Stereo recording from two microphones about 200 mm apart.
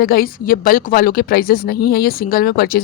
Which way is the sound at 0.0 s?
50° left (ahead or behind).